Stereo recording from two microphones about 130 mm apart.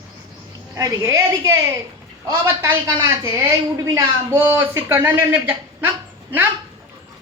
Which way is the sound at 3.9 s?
20° right (ahead or behind).